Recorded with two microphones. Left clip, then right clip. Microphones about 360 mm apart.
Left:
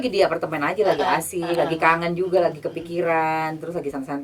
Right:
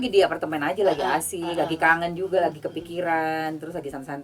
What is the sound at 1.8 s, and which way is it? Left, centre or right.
A woman's voice, right.